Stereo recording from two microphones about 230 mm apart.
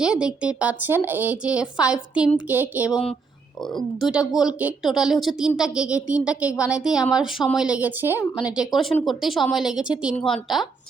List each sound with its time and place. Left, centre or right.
0.0 s speech: centre